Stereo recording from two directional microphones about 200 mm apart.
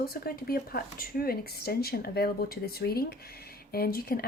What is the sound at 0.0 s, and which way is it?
Speech, 50° left (ahead or behind).